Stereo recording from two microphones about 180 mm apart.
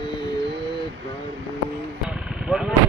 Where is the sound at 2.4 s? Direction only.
5° right (ahead or behind).